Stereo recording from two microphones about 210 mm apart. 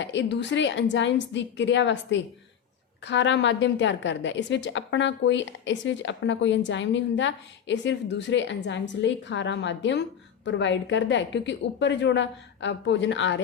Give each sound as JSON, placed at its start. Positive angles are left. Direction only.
{"t": 0.0, "sound": "a woman's voice", "side_deg": 60}